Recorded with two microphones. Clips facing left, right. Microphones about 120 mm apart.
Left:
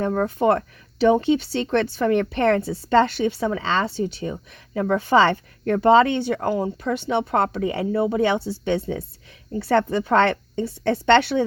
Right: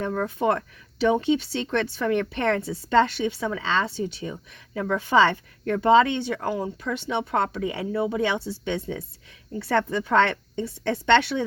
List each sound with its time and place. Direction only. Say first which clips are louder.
0.0 s a woman's voice: left 4 dB; 40° left (ahead or behind)